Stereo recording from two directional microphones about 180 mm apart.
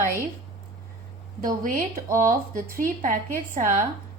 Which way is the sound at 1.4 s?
50° right (ahead or behind).